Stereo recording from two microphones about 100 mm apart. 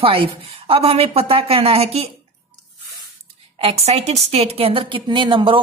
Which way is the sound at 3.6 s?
85° right.